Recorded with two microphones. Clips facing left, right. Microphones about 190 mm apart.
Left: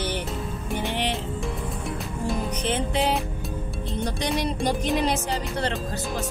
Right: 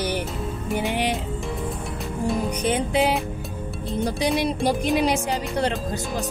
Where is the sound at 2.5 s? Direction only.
10° right (ahead or behind).